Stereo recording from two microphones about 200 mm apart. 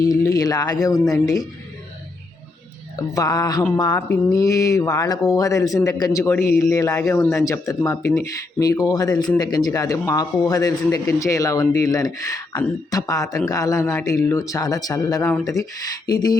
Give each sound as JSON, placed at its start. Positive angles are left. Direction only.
{"t": 0.0, "sound": "speech", "side_deg": 15}
{"t": 2.9, "sound": "speech", "side_deg": 20}